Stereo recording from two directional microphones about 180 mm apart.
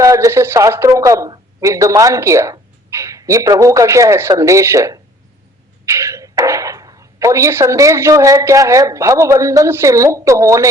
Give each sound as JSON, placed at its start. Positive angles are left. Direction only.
{"t": 0.0, "sound": "speech", "side_deg": -15}